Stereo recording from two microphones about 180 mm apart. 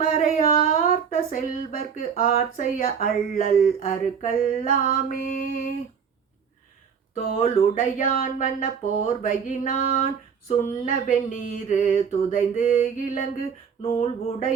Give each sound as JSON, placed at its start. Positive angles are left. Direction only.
{"t": 0.0, "sound": "a sound", "side_deg": 45}
{"t": 2.3, "sound": "speech", "side_deg": 45}
{"t": 7.4, "sound": "speech", "side_deg": 45}